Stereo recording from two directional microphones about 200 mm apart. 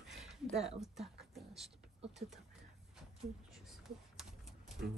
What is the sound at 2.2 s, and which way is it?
Speech, 35° right (ahead or behind).